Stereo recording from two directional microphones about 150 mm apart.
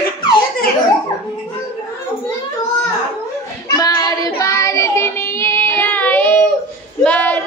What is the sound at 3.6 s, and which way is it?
Child singing, 25° left (ahead or behind).